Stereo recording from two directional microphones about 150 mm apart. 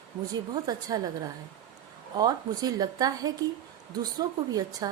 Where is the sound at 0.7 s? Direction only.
25° right (ahead or behind).